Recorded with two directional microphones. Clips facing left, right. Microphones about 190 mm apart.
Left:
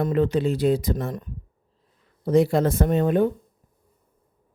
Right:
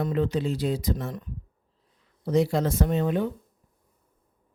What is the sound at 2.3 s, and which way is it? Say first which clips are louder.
Speech: left 4 dB; 55° left (ahead or behind).